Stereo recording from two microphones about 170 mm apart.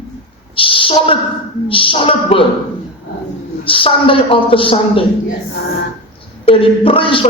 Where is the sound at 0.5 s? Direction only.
30° left (ahead or behind).